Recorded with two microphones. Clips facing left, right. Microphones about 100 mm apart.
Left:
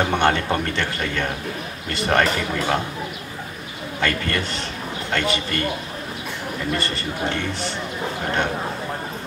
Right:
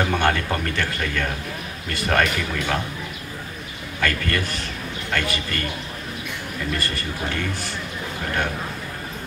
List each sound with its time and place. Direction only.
0.0 s a man's voice: 25° left (ahead or behind)
4.0 s a man's voice: 30° left (ahead or behind)
6.7 s a man's voice: 25° left (ahead or behind)